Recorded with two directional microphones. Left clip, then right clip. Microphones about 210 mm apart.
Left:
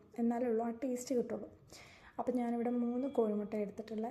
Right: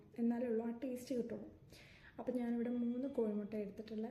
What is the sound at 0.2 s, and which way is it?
A woman's voice, 15° left (ahead or behind).